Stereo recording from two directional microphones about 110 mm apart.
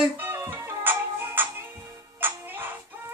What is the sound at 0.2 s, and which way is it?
Music, 20° right (ahead or behind).